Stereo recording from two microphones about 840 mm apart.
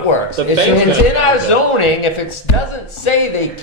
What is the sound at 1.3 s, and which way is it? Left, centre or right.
Speech, left.